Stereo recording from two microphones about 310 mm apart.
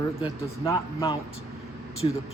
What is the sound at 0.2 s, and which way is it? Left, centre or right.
Speech, centre.